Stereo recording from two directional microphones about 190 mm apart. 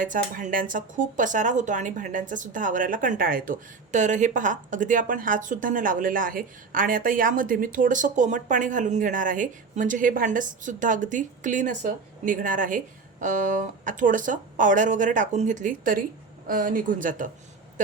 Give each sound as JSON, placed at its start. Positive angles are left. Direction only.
{"t": 0.0, "sound": "speech", "side_deg": -45}